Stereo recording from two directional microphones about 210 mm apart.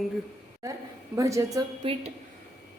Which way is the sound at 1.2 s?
15° right (ahead or behind).